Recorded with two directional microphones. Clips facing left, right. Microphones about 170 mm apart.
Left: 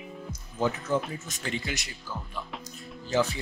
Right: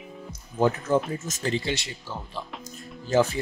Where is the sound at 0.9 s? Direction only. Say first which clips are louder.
Right 5 dB; 45° right (ahead or behind); by 2.4 s 30° right (ahead or behind).